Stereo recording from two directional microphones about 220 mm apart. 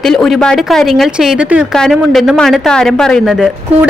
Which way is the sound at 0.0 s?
Centre (ahead or behind).